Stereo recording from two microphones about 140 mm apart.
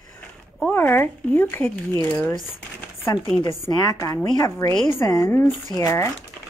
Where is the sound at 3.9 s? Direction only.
25° left (ahead or behind).